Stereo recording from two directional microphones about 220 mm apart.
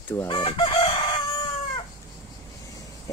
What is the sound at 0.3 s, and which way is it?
Chicken, 20° left (ahead or behind).